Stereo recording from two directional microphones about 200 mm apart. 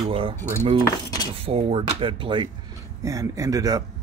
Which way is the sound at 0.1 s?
25° right (ahead or behind).